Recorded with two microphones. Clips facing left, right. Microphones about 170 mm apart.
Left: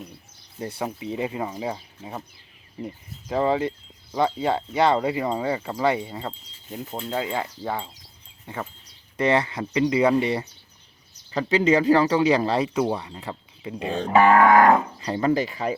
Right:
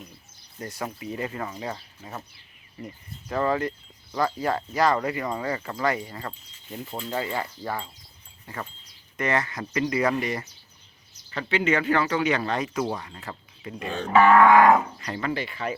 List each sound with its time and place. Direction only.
1.1 s speech: 15° left (ahead or behind)
11.5 s speech: 35° left (ahead or behind)
13.1 s speech: 15° left (ahead or behind)
13.9 s speech: 30° left (ahead or behind)